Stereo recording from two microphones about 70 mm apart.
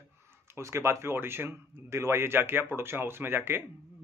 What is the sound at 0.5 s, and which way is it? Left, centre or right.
Speech, right.